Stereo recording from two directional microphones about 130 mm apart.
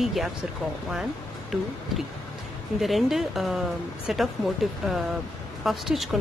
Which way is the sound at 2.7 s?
Centre (ahead or behind).